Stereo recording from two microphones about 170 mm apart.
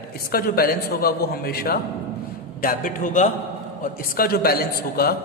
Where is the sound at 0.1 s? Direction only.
65° left (ahead or behind).